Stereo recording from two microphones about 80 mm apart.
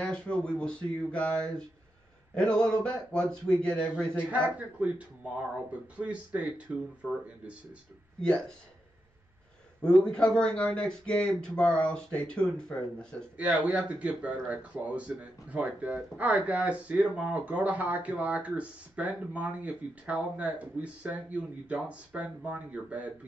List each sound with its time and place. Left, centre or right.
0.0 s speech: centre
4.5 s speech: centre
9.8 s speech: centre
13.4 s speech: centre